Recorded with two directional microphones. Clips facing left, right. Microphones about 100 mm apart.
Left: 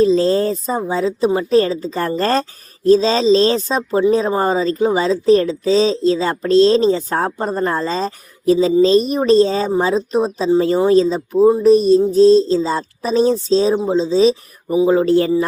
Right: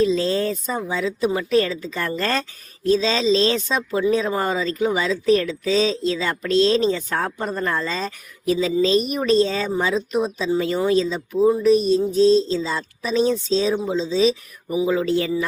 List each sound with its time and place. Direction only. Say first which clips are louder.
0.0 s a woman's voice: left 6 dB; 35° left (ahead or behind)